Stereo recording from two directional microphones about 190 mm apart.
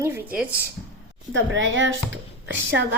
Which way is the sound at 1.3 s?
85° right.